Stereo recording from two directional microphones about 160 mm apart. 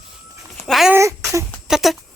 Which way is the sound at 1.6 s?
Centre (ahead or behind).